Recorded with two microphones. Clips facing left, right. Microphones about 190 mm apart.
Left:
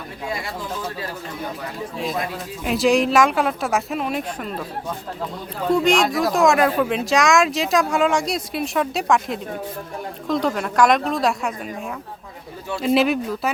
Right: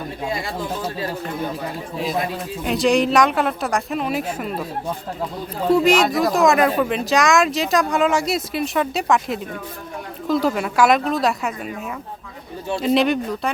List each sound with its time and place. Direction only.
2.6 s speech: centre (ahead or behind)
5.6 s speech: 5° right (ahead or behind)
12.8 s speech: 5° left (ahead or behind)